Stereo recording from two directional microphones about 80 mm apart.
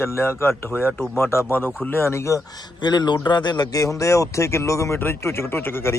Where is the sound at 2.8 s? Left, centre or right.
Left.